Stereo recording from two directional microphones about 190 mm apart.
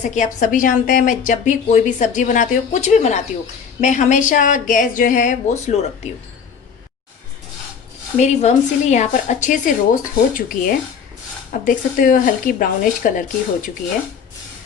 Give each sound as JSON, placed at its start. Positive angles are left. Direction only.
{"t": 0.0, "sound": "speech", "side_deg": 40}
{"t": 8.2, "sound": "speech", "side_deg": 35}